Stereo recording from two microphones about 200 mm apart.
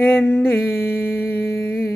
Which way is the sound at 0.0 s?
10° left (ahead or behind).